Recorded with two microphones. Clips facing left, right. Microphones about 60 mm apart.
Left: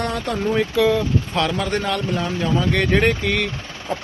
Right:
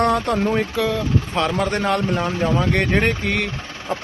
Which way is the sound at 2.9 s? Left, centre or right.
Centre.